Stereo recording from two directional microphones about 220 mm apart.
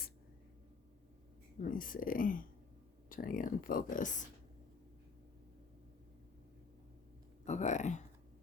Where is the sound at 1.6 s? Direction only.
40° left (ahead or behind).